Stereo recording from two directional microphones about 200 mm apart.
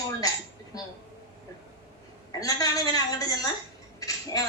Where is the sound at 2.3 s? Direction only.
15° left (ahead or behind).